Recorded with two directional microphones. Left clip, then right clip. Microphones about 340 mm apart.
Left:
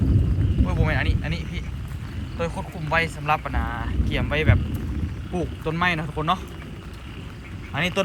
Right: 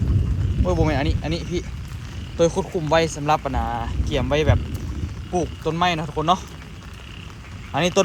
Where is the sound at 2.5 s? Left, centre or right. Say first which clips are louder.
Right 8 dB; right.